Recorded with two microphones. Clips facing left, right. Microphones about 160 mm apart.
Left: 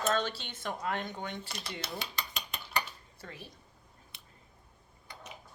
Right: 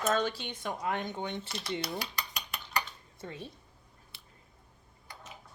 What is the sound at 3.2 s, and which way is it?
Speech, 25° right (ahead or behind).